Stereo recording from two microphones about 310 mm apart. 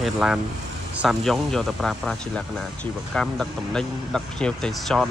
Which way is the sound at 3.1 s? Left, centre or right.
Centre.